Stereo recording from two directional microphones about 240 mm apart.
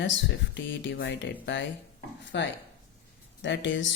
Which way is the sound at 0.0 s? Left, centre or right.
Left.